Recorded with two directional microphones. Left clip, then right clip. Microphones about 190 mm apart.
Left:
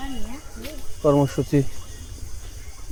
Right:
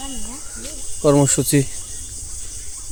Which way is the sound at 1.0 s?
60° right (ahead or behind).